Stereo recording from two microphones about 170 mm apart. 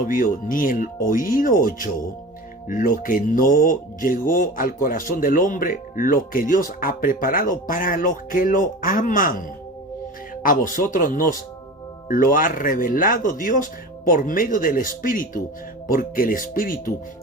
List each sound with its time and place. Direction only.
0.1 s speech: 55° left (ahead or behind)
10.4 s speech: 55° left (ahead or behind)